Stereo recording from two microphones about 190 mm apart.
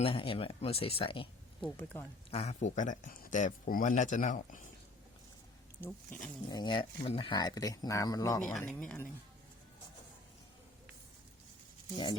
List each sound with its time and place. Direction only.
0.0 s speech: 30° left (ahead or behind)
1.6 s speech: 10° left (ahead or behind)
2.3 s speech: 35° left (ahead or behind)
6.1 s speech: 10° left (ahead or behind)
6.5 s speech: 20° left (ahead or behind)
8.4 s speech: 5° left (ahead or behind)